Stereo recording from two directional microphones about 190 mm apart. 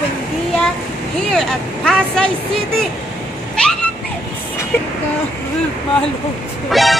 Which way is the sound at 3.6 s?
5° left (ahead or behind).